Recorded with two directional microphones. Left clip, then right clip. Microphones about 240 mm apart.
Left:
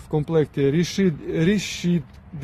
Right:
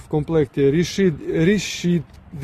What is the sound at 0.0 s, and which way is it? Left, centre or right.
Speech, centre.